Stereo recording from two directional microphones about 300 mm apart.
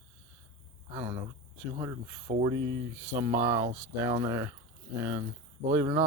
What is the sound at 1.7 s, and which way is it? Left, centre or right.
Speech, centre.